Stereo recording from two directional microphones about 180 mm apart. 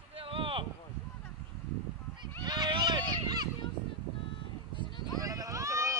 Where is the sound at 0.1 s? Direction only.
30° right (ahead or behind).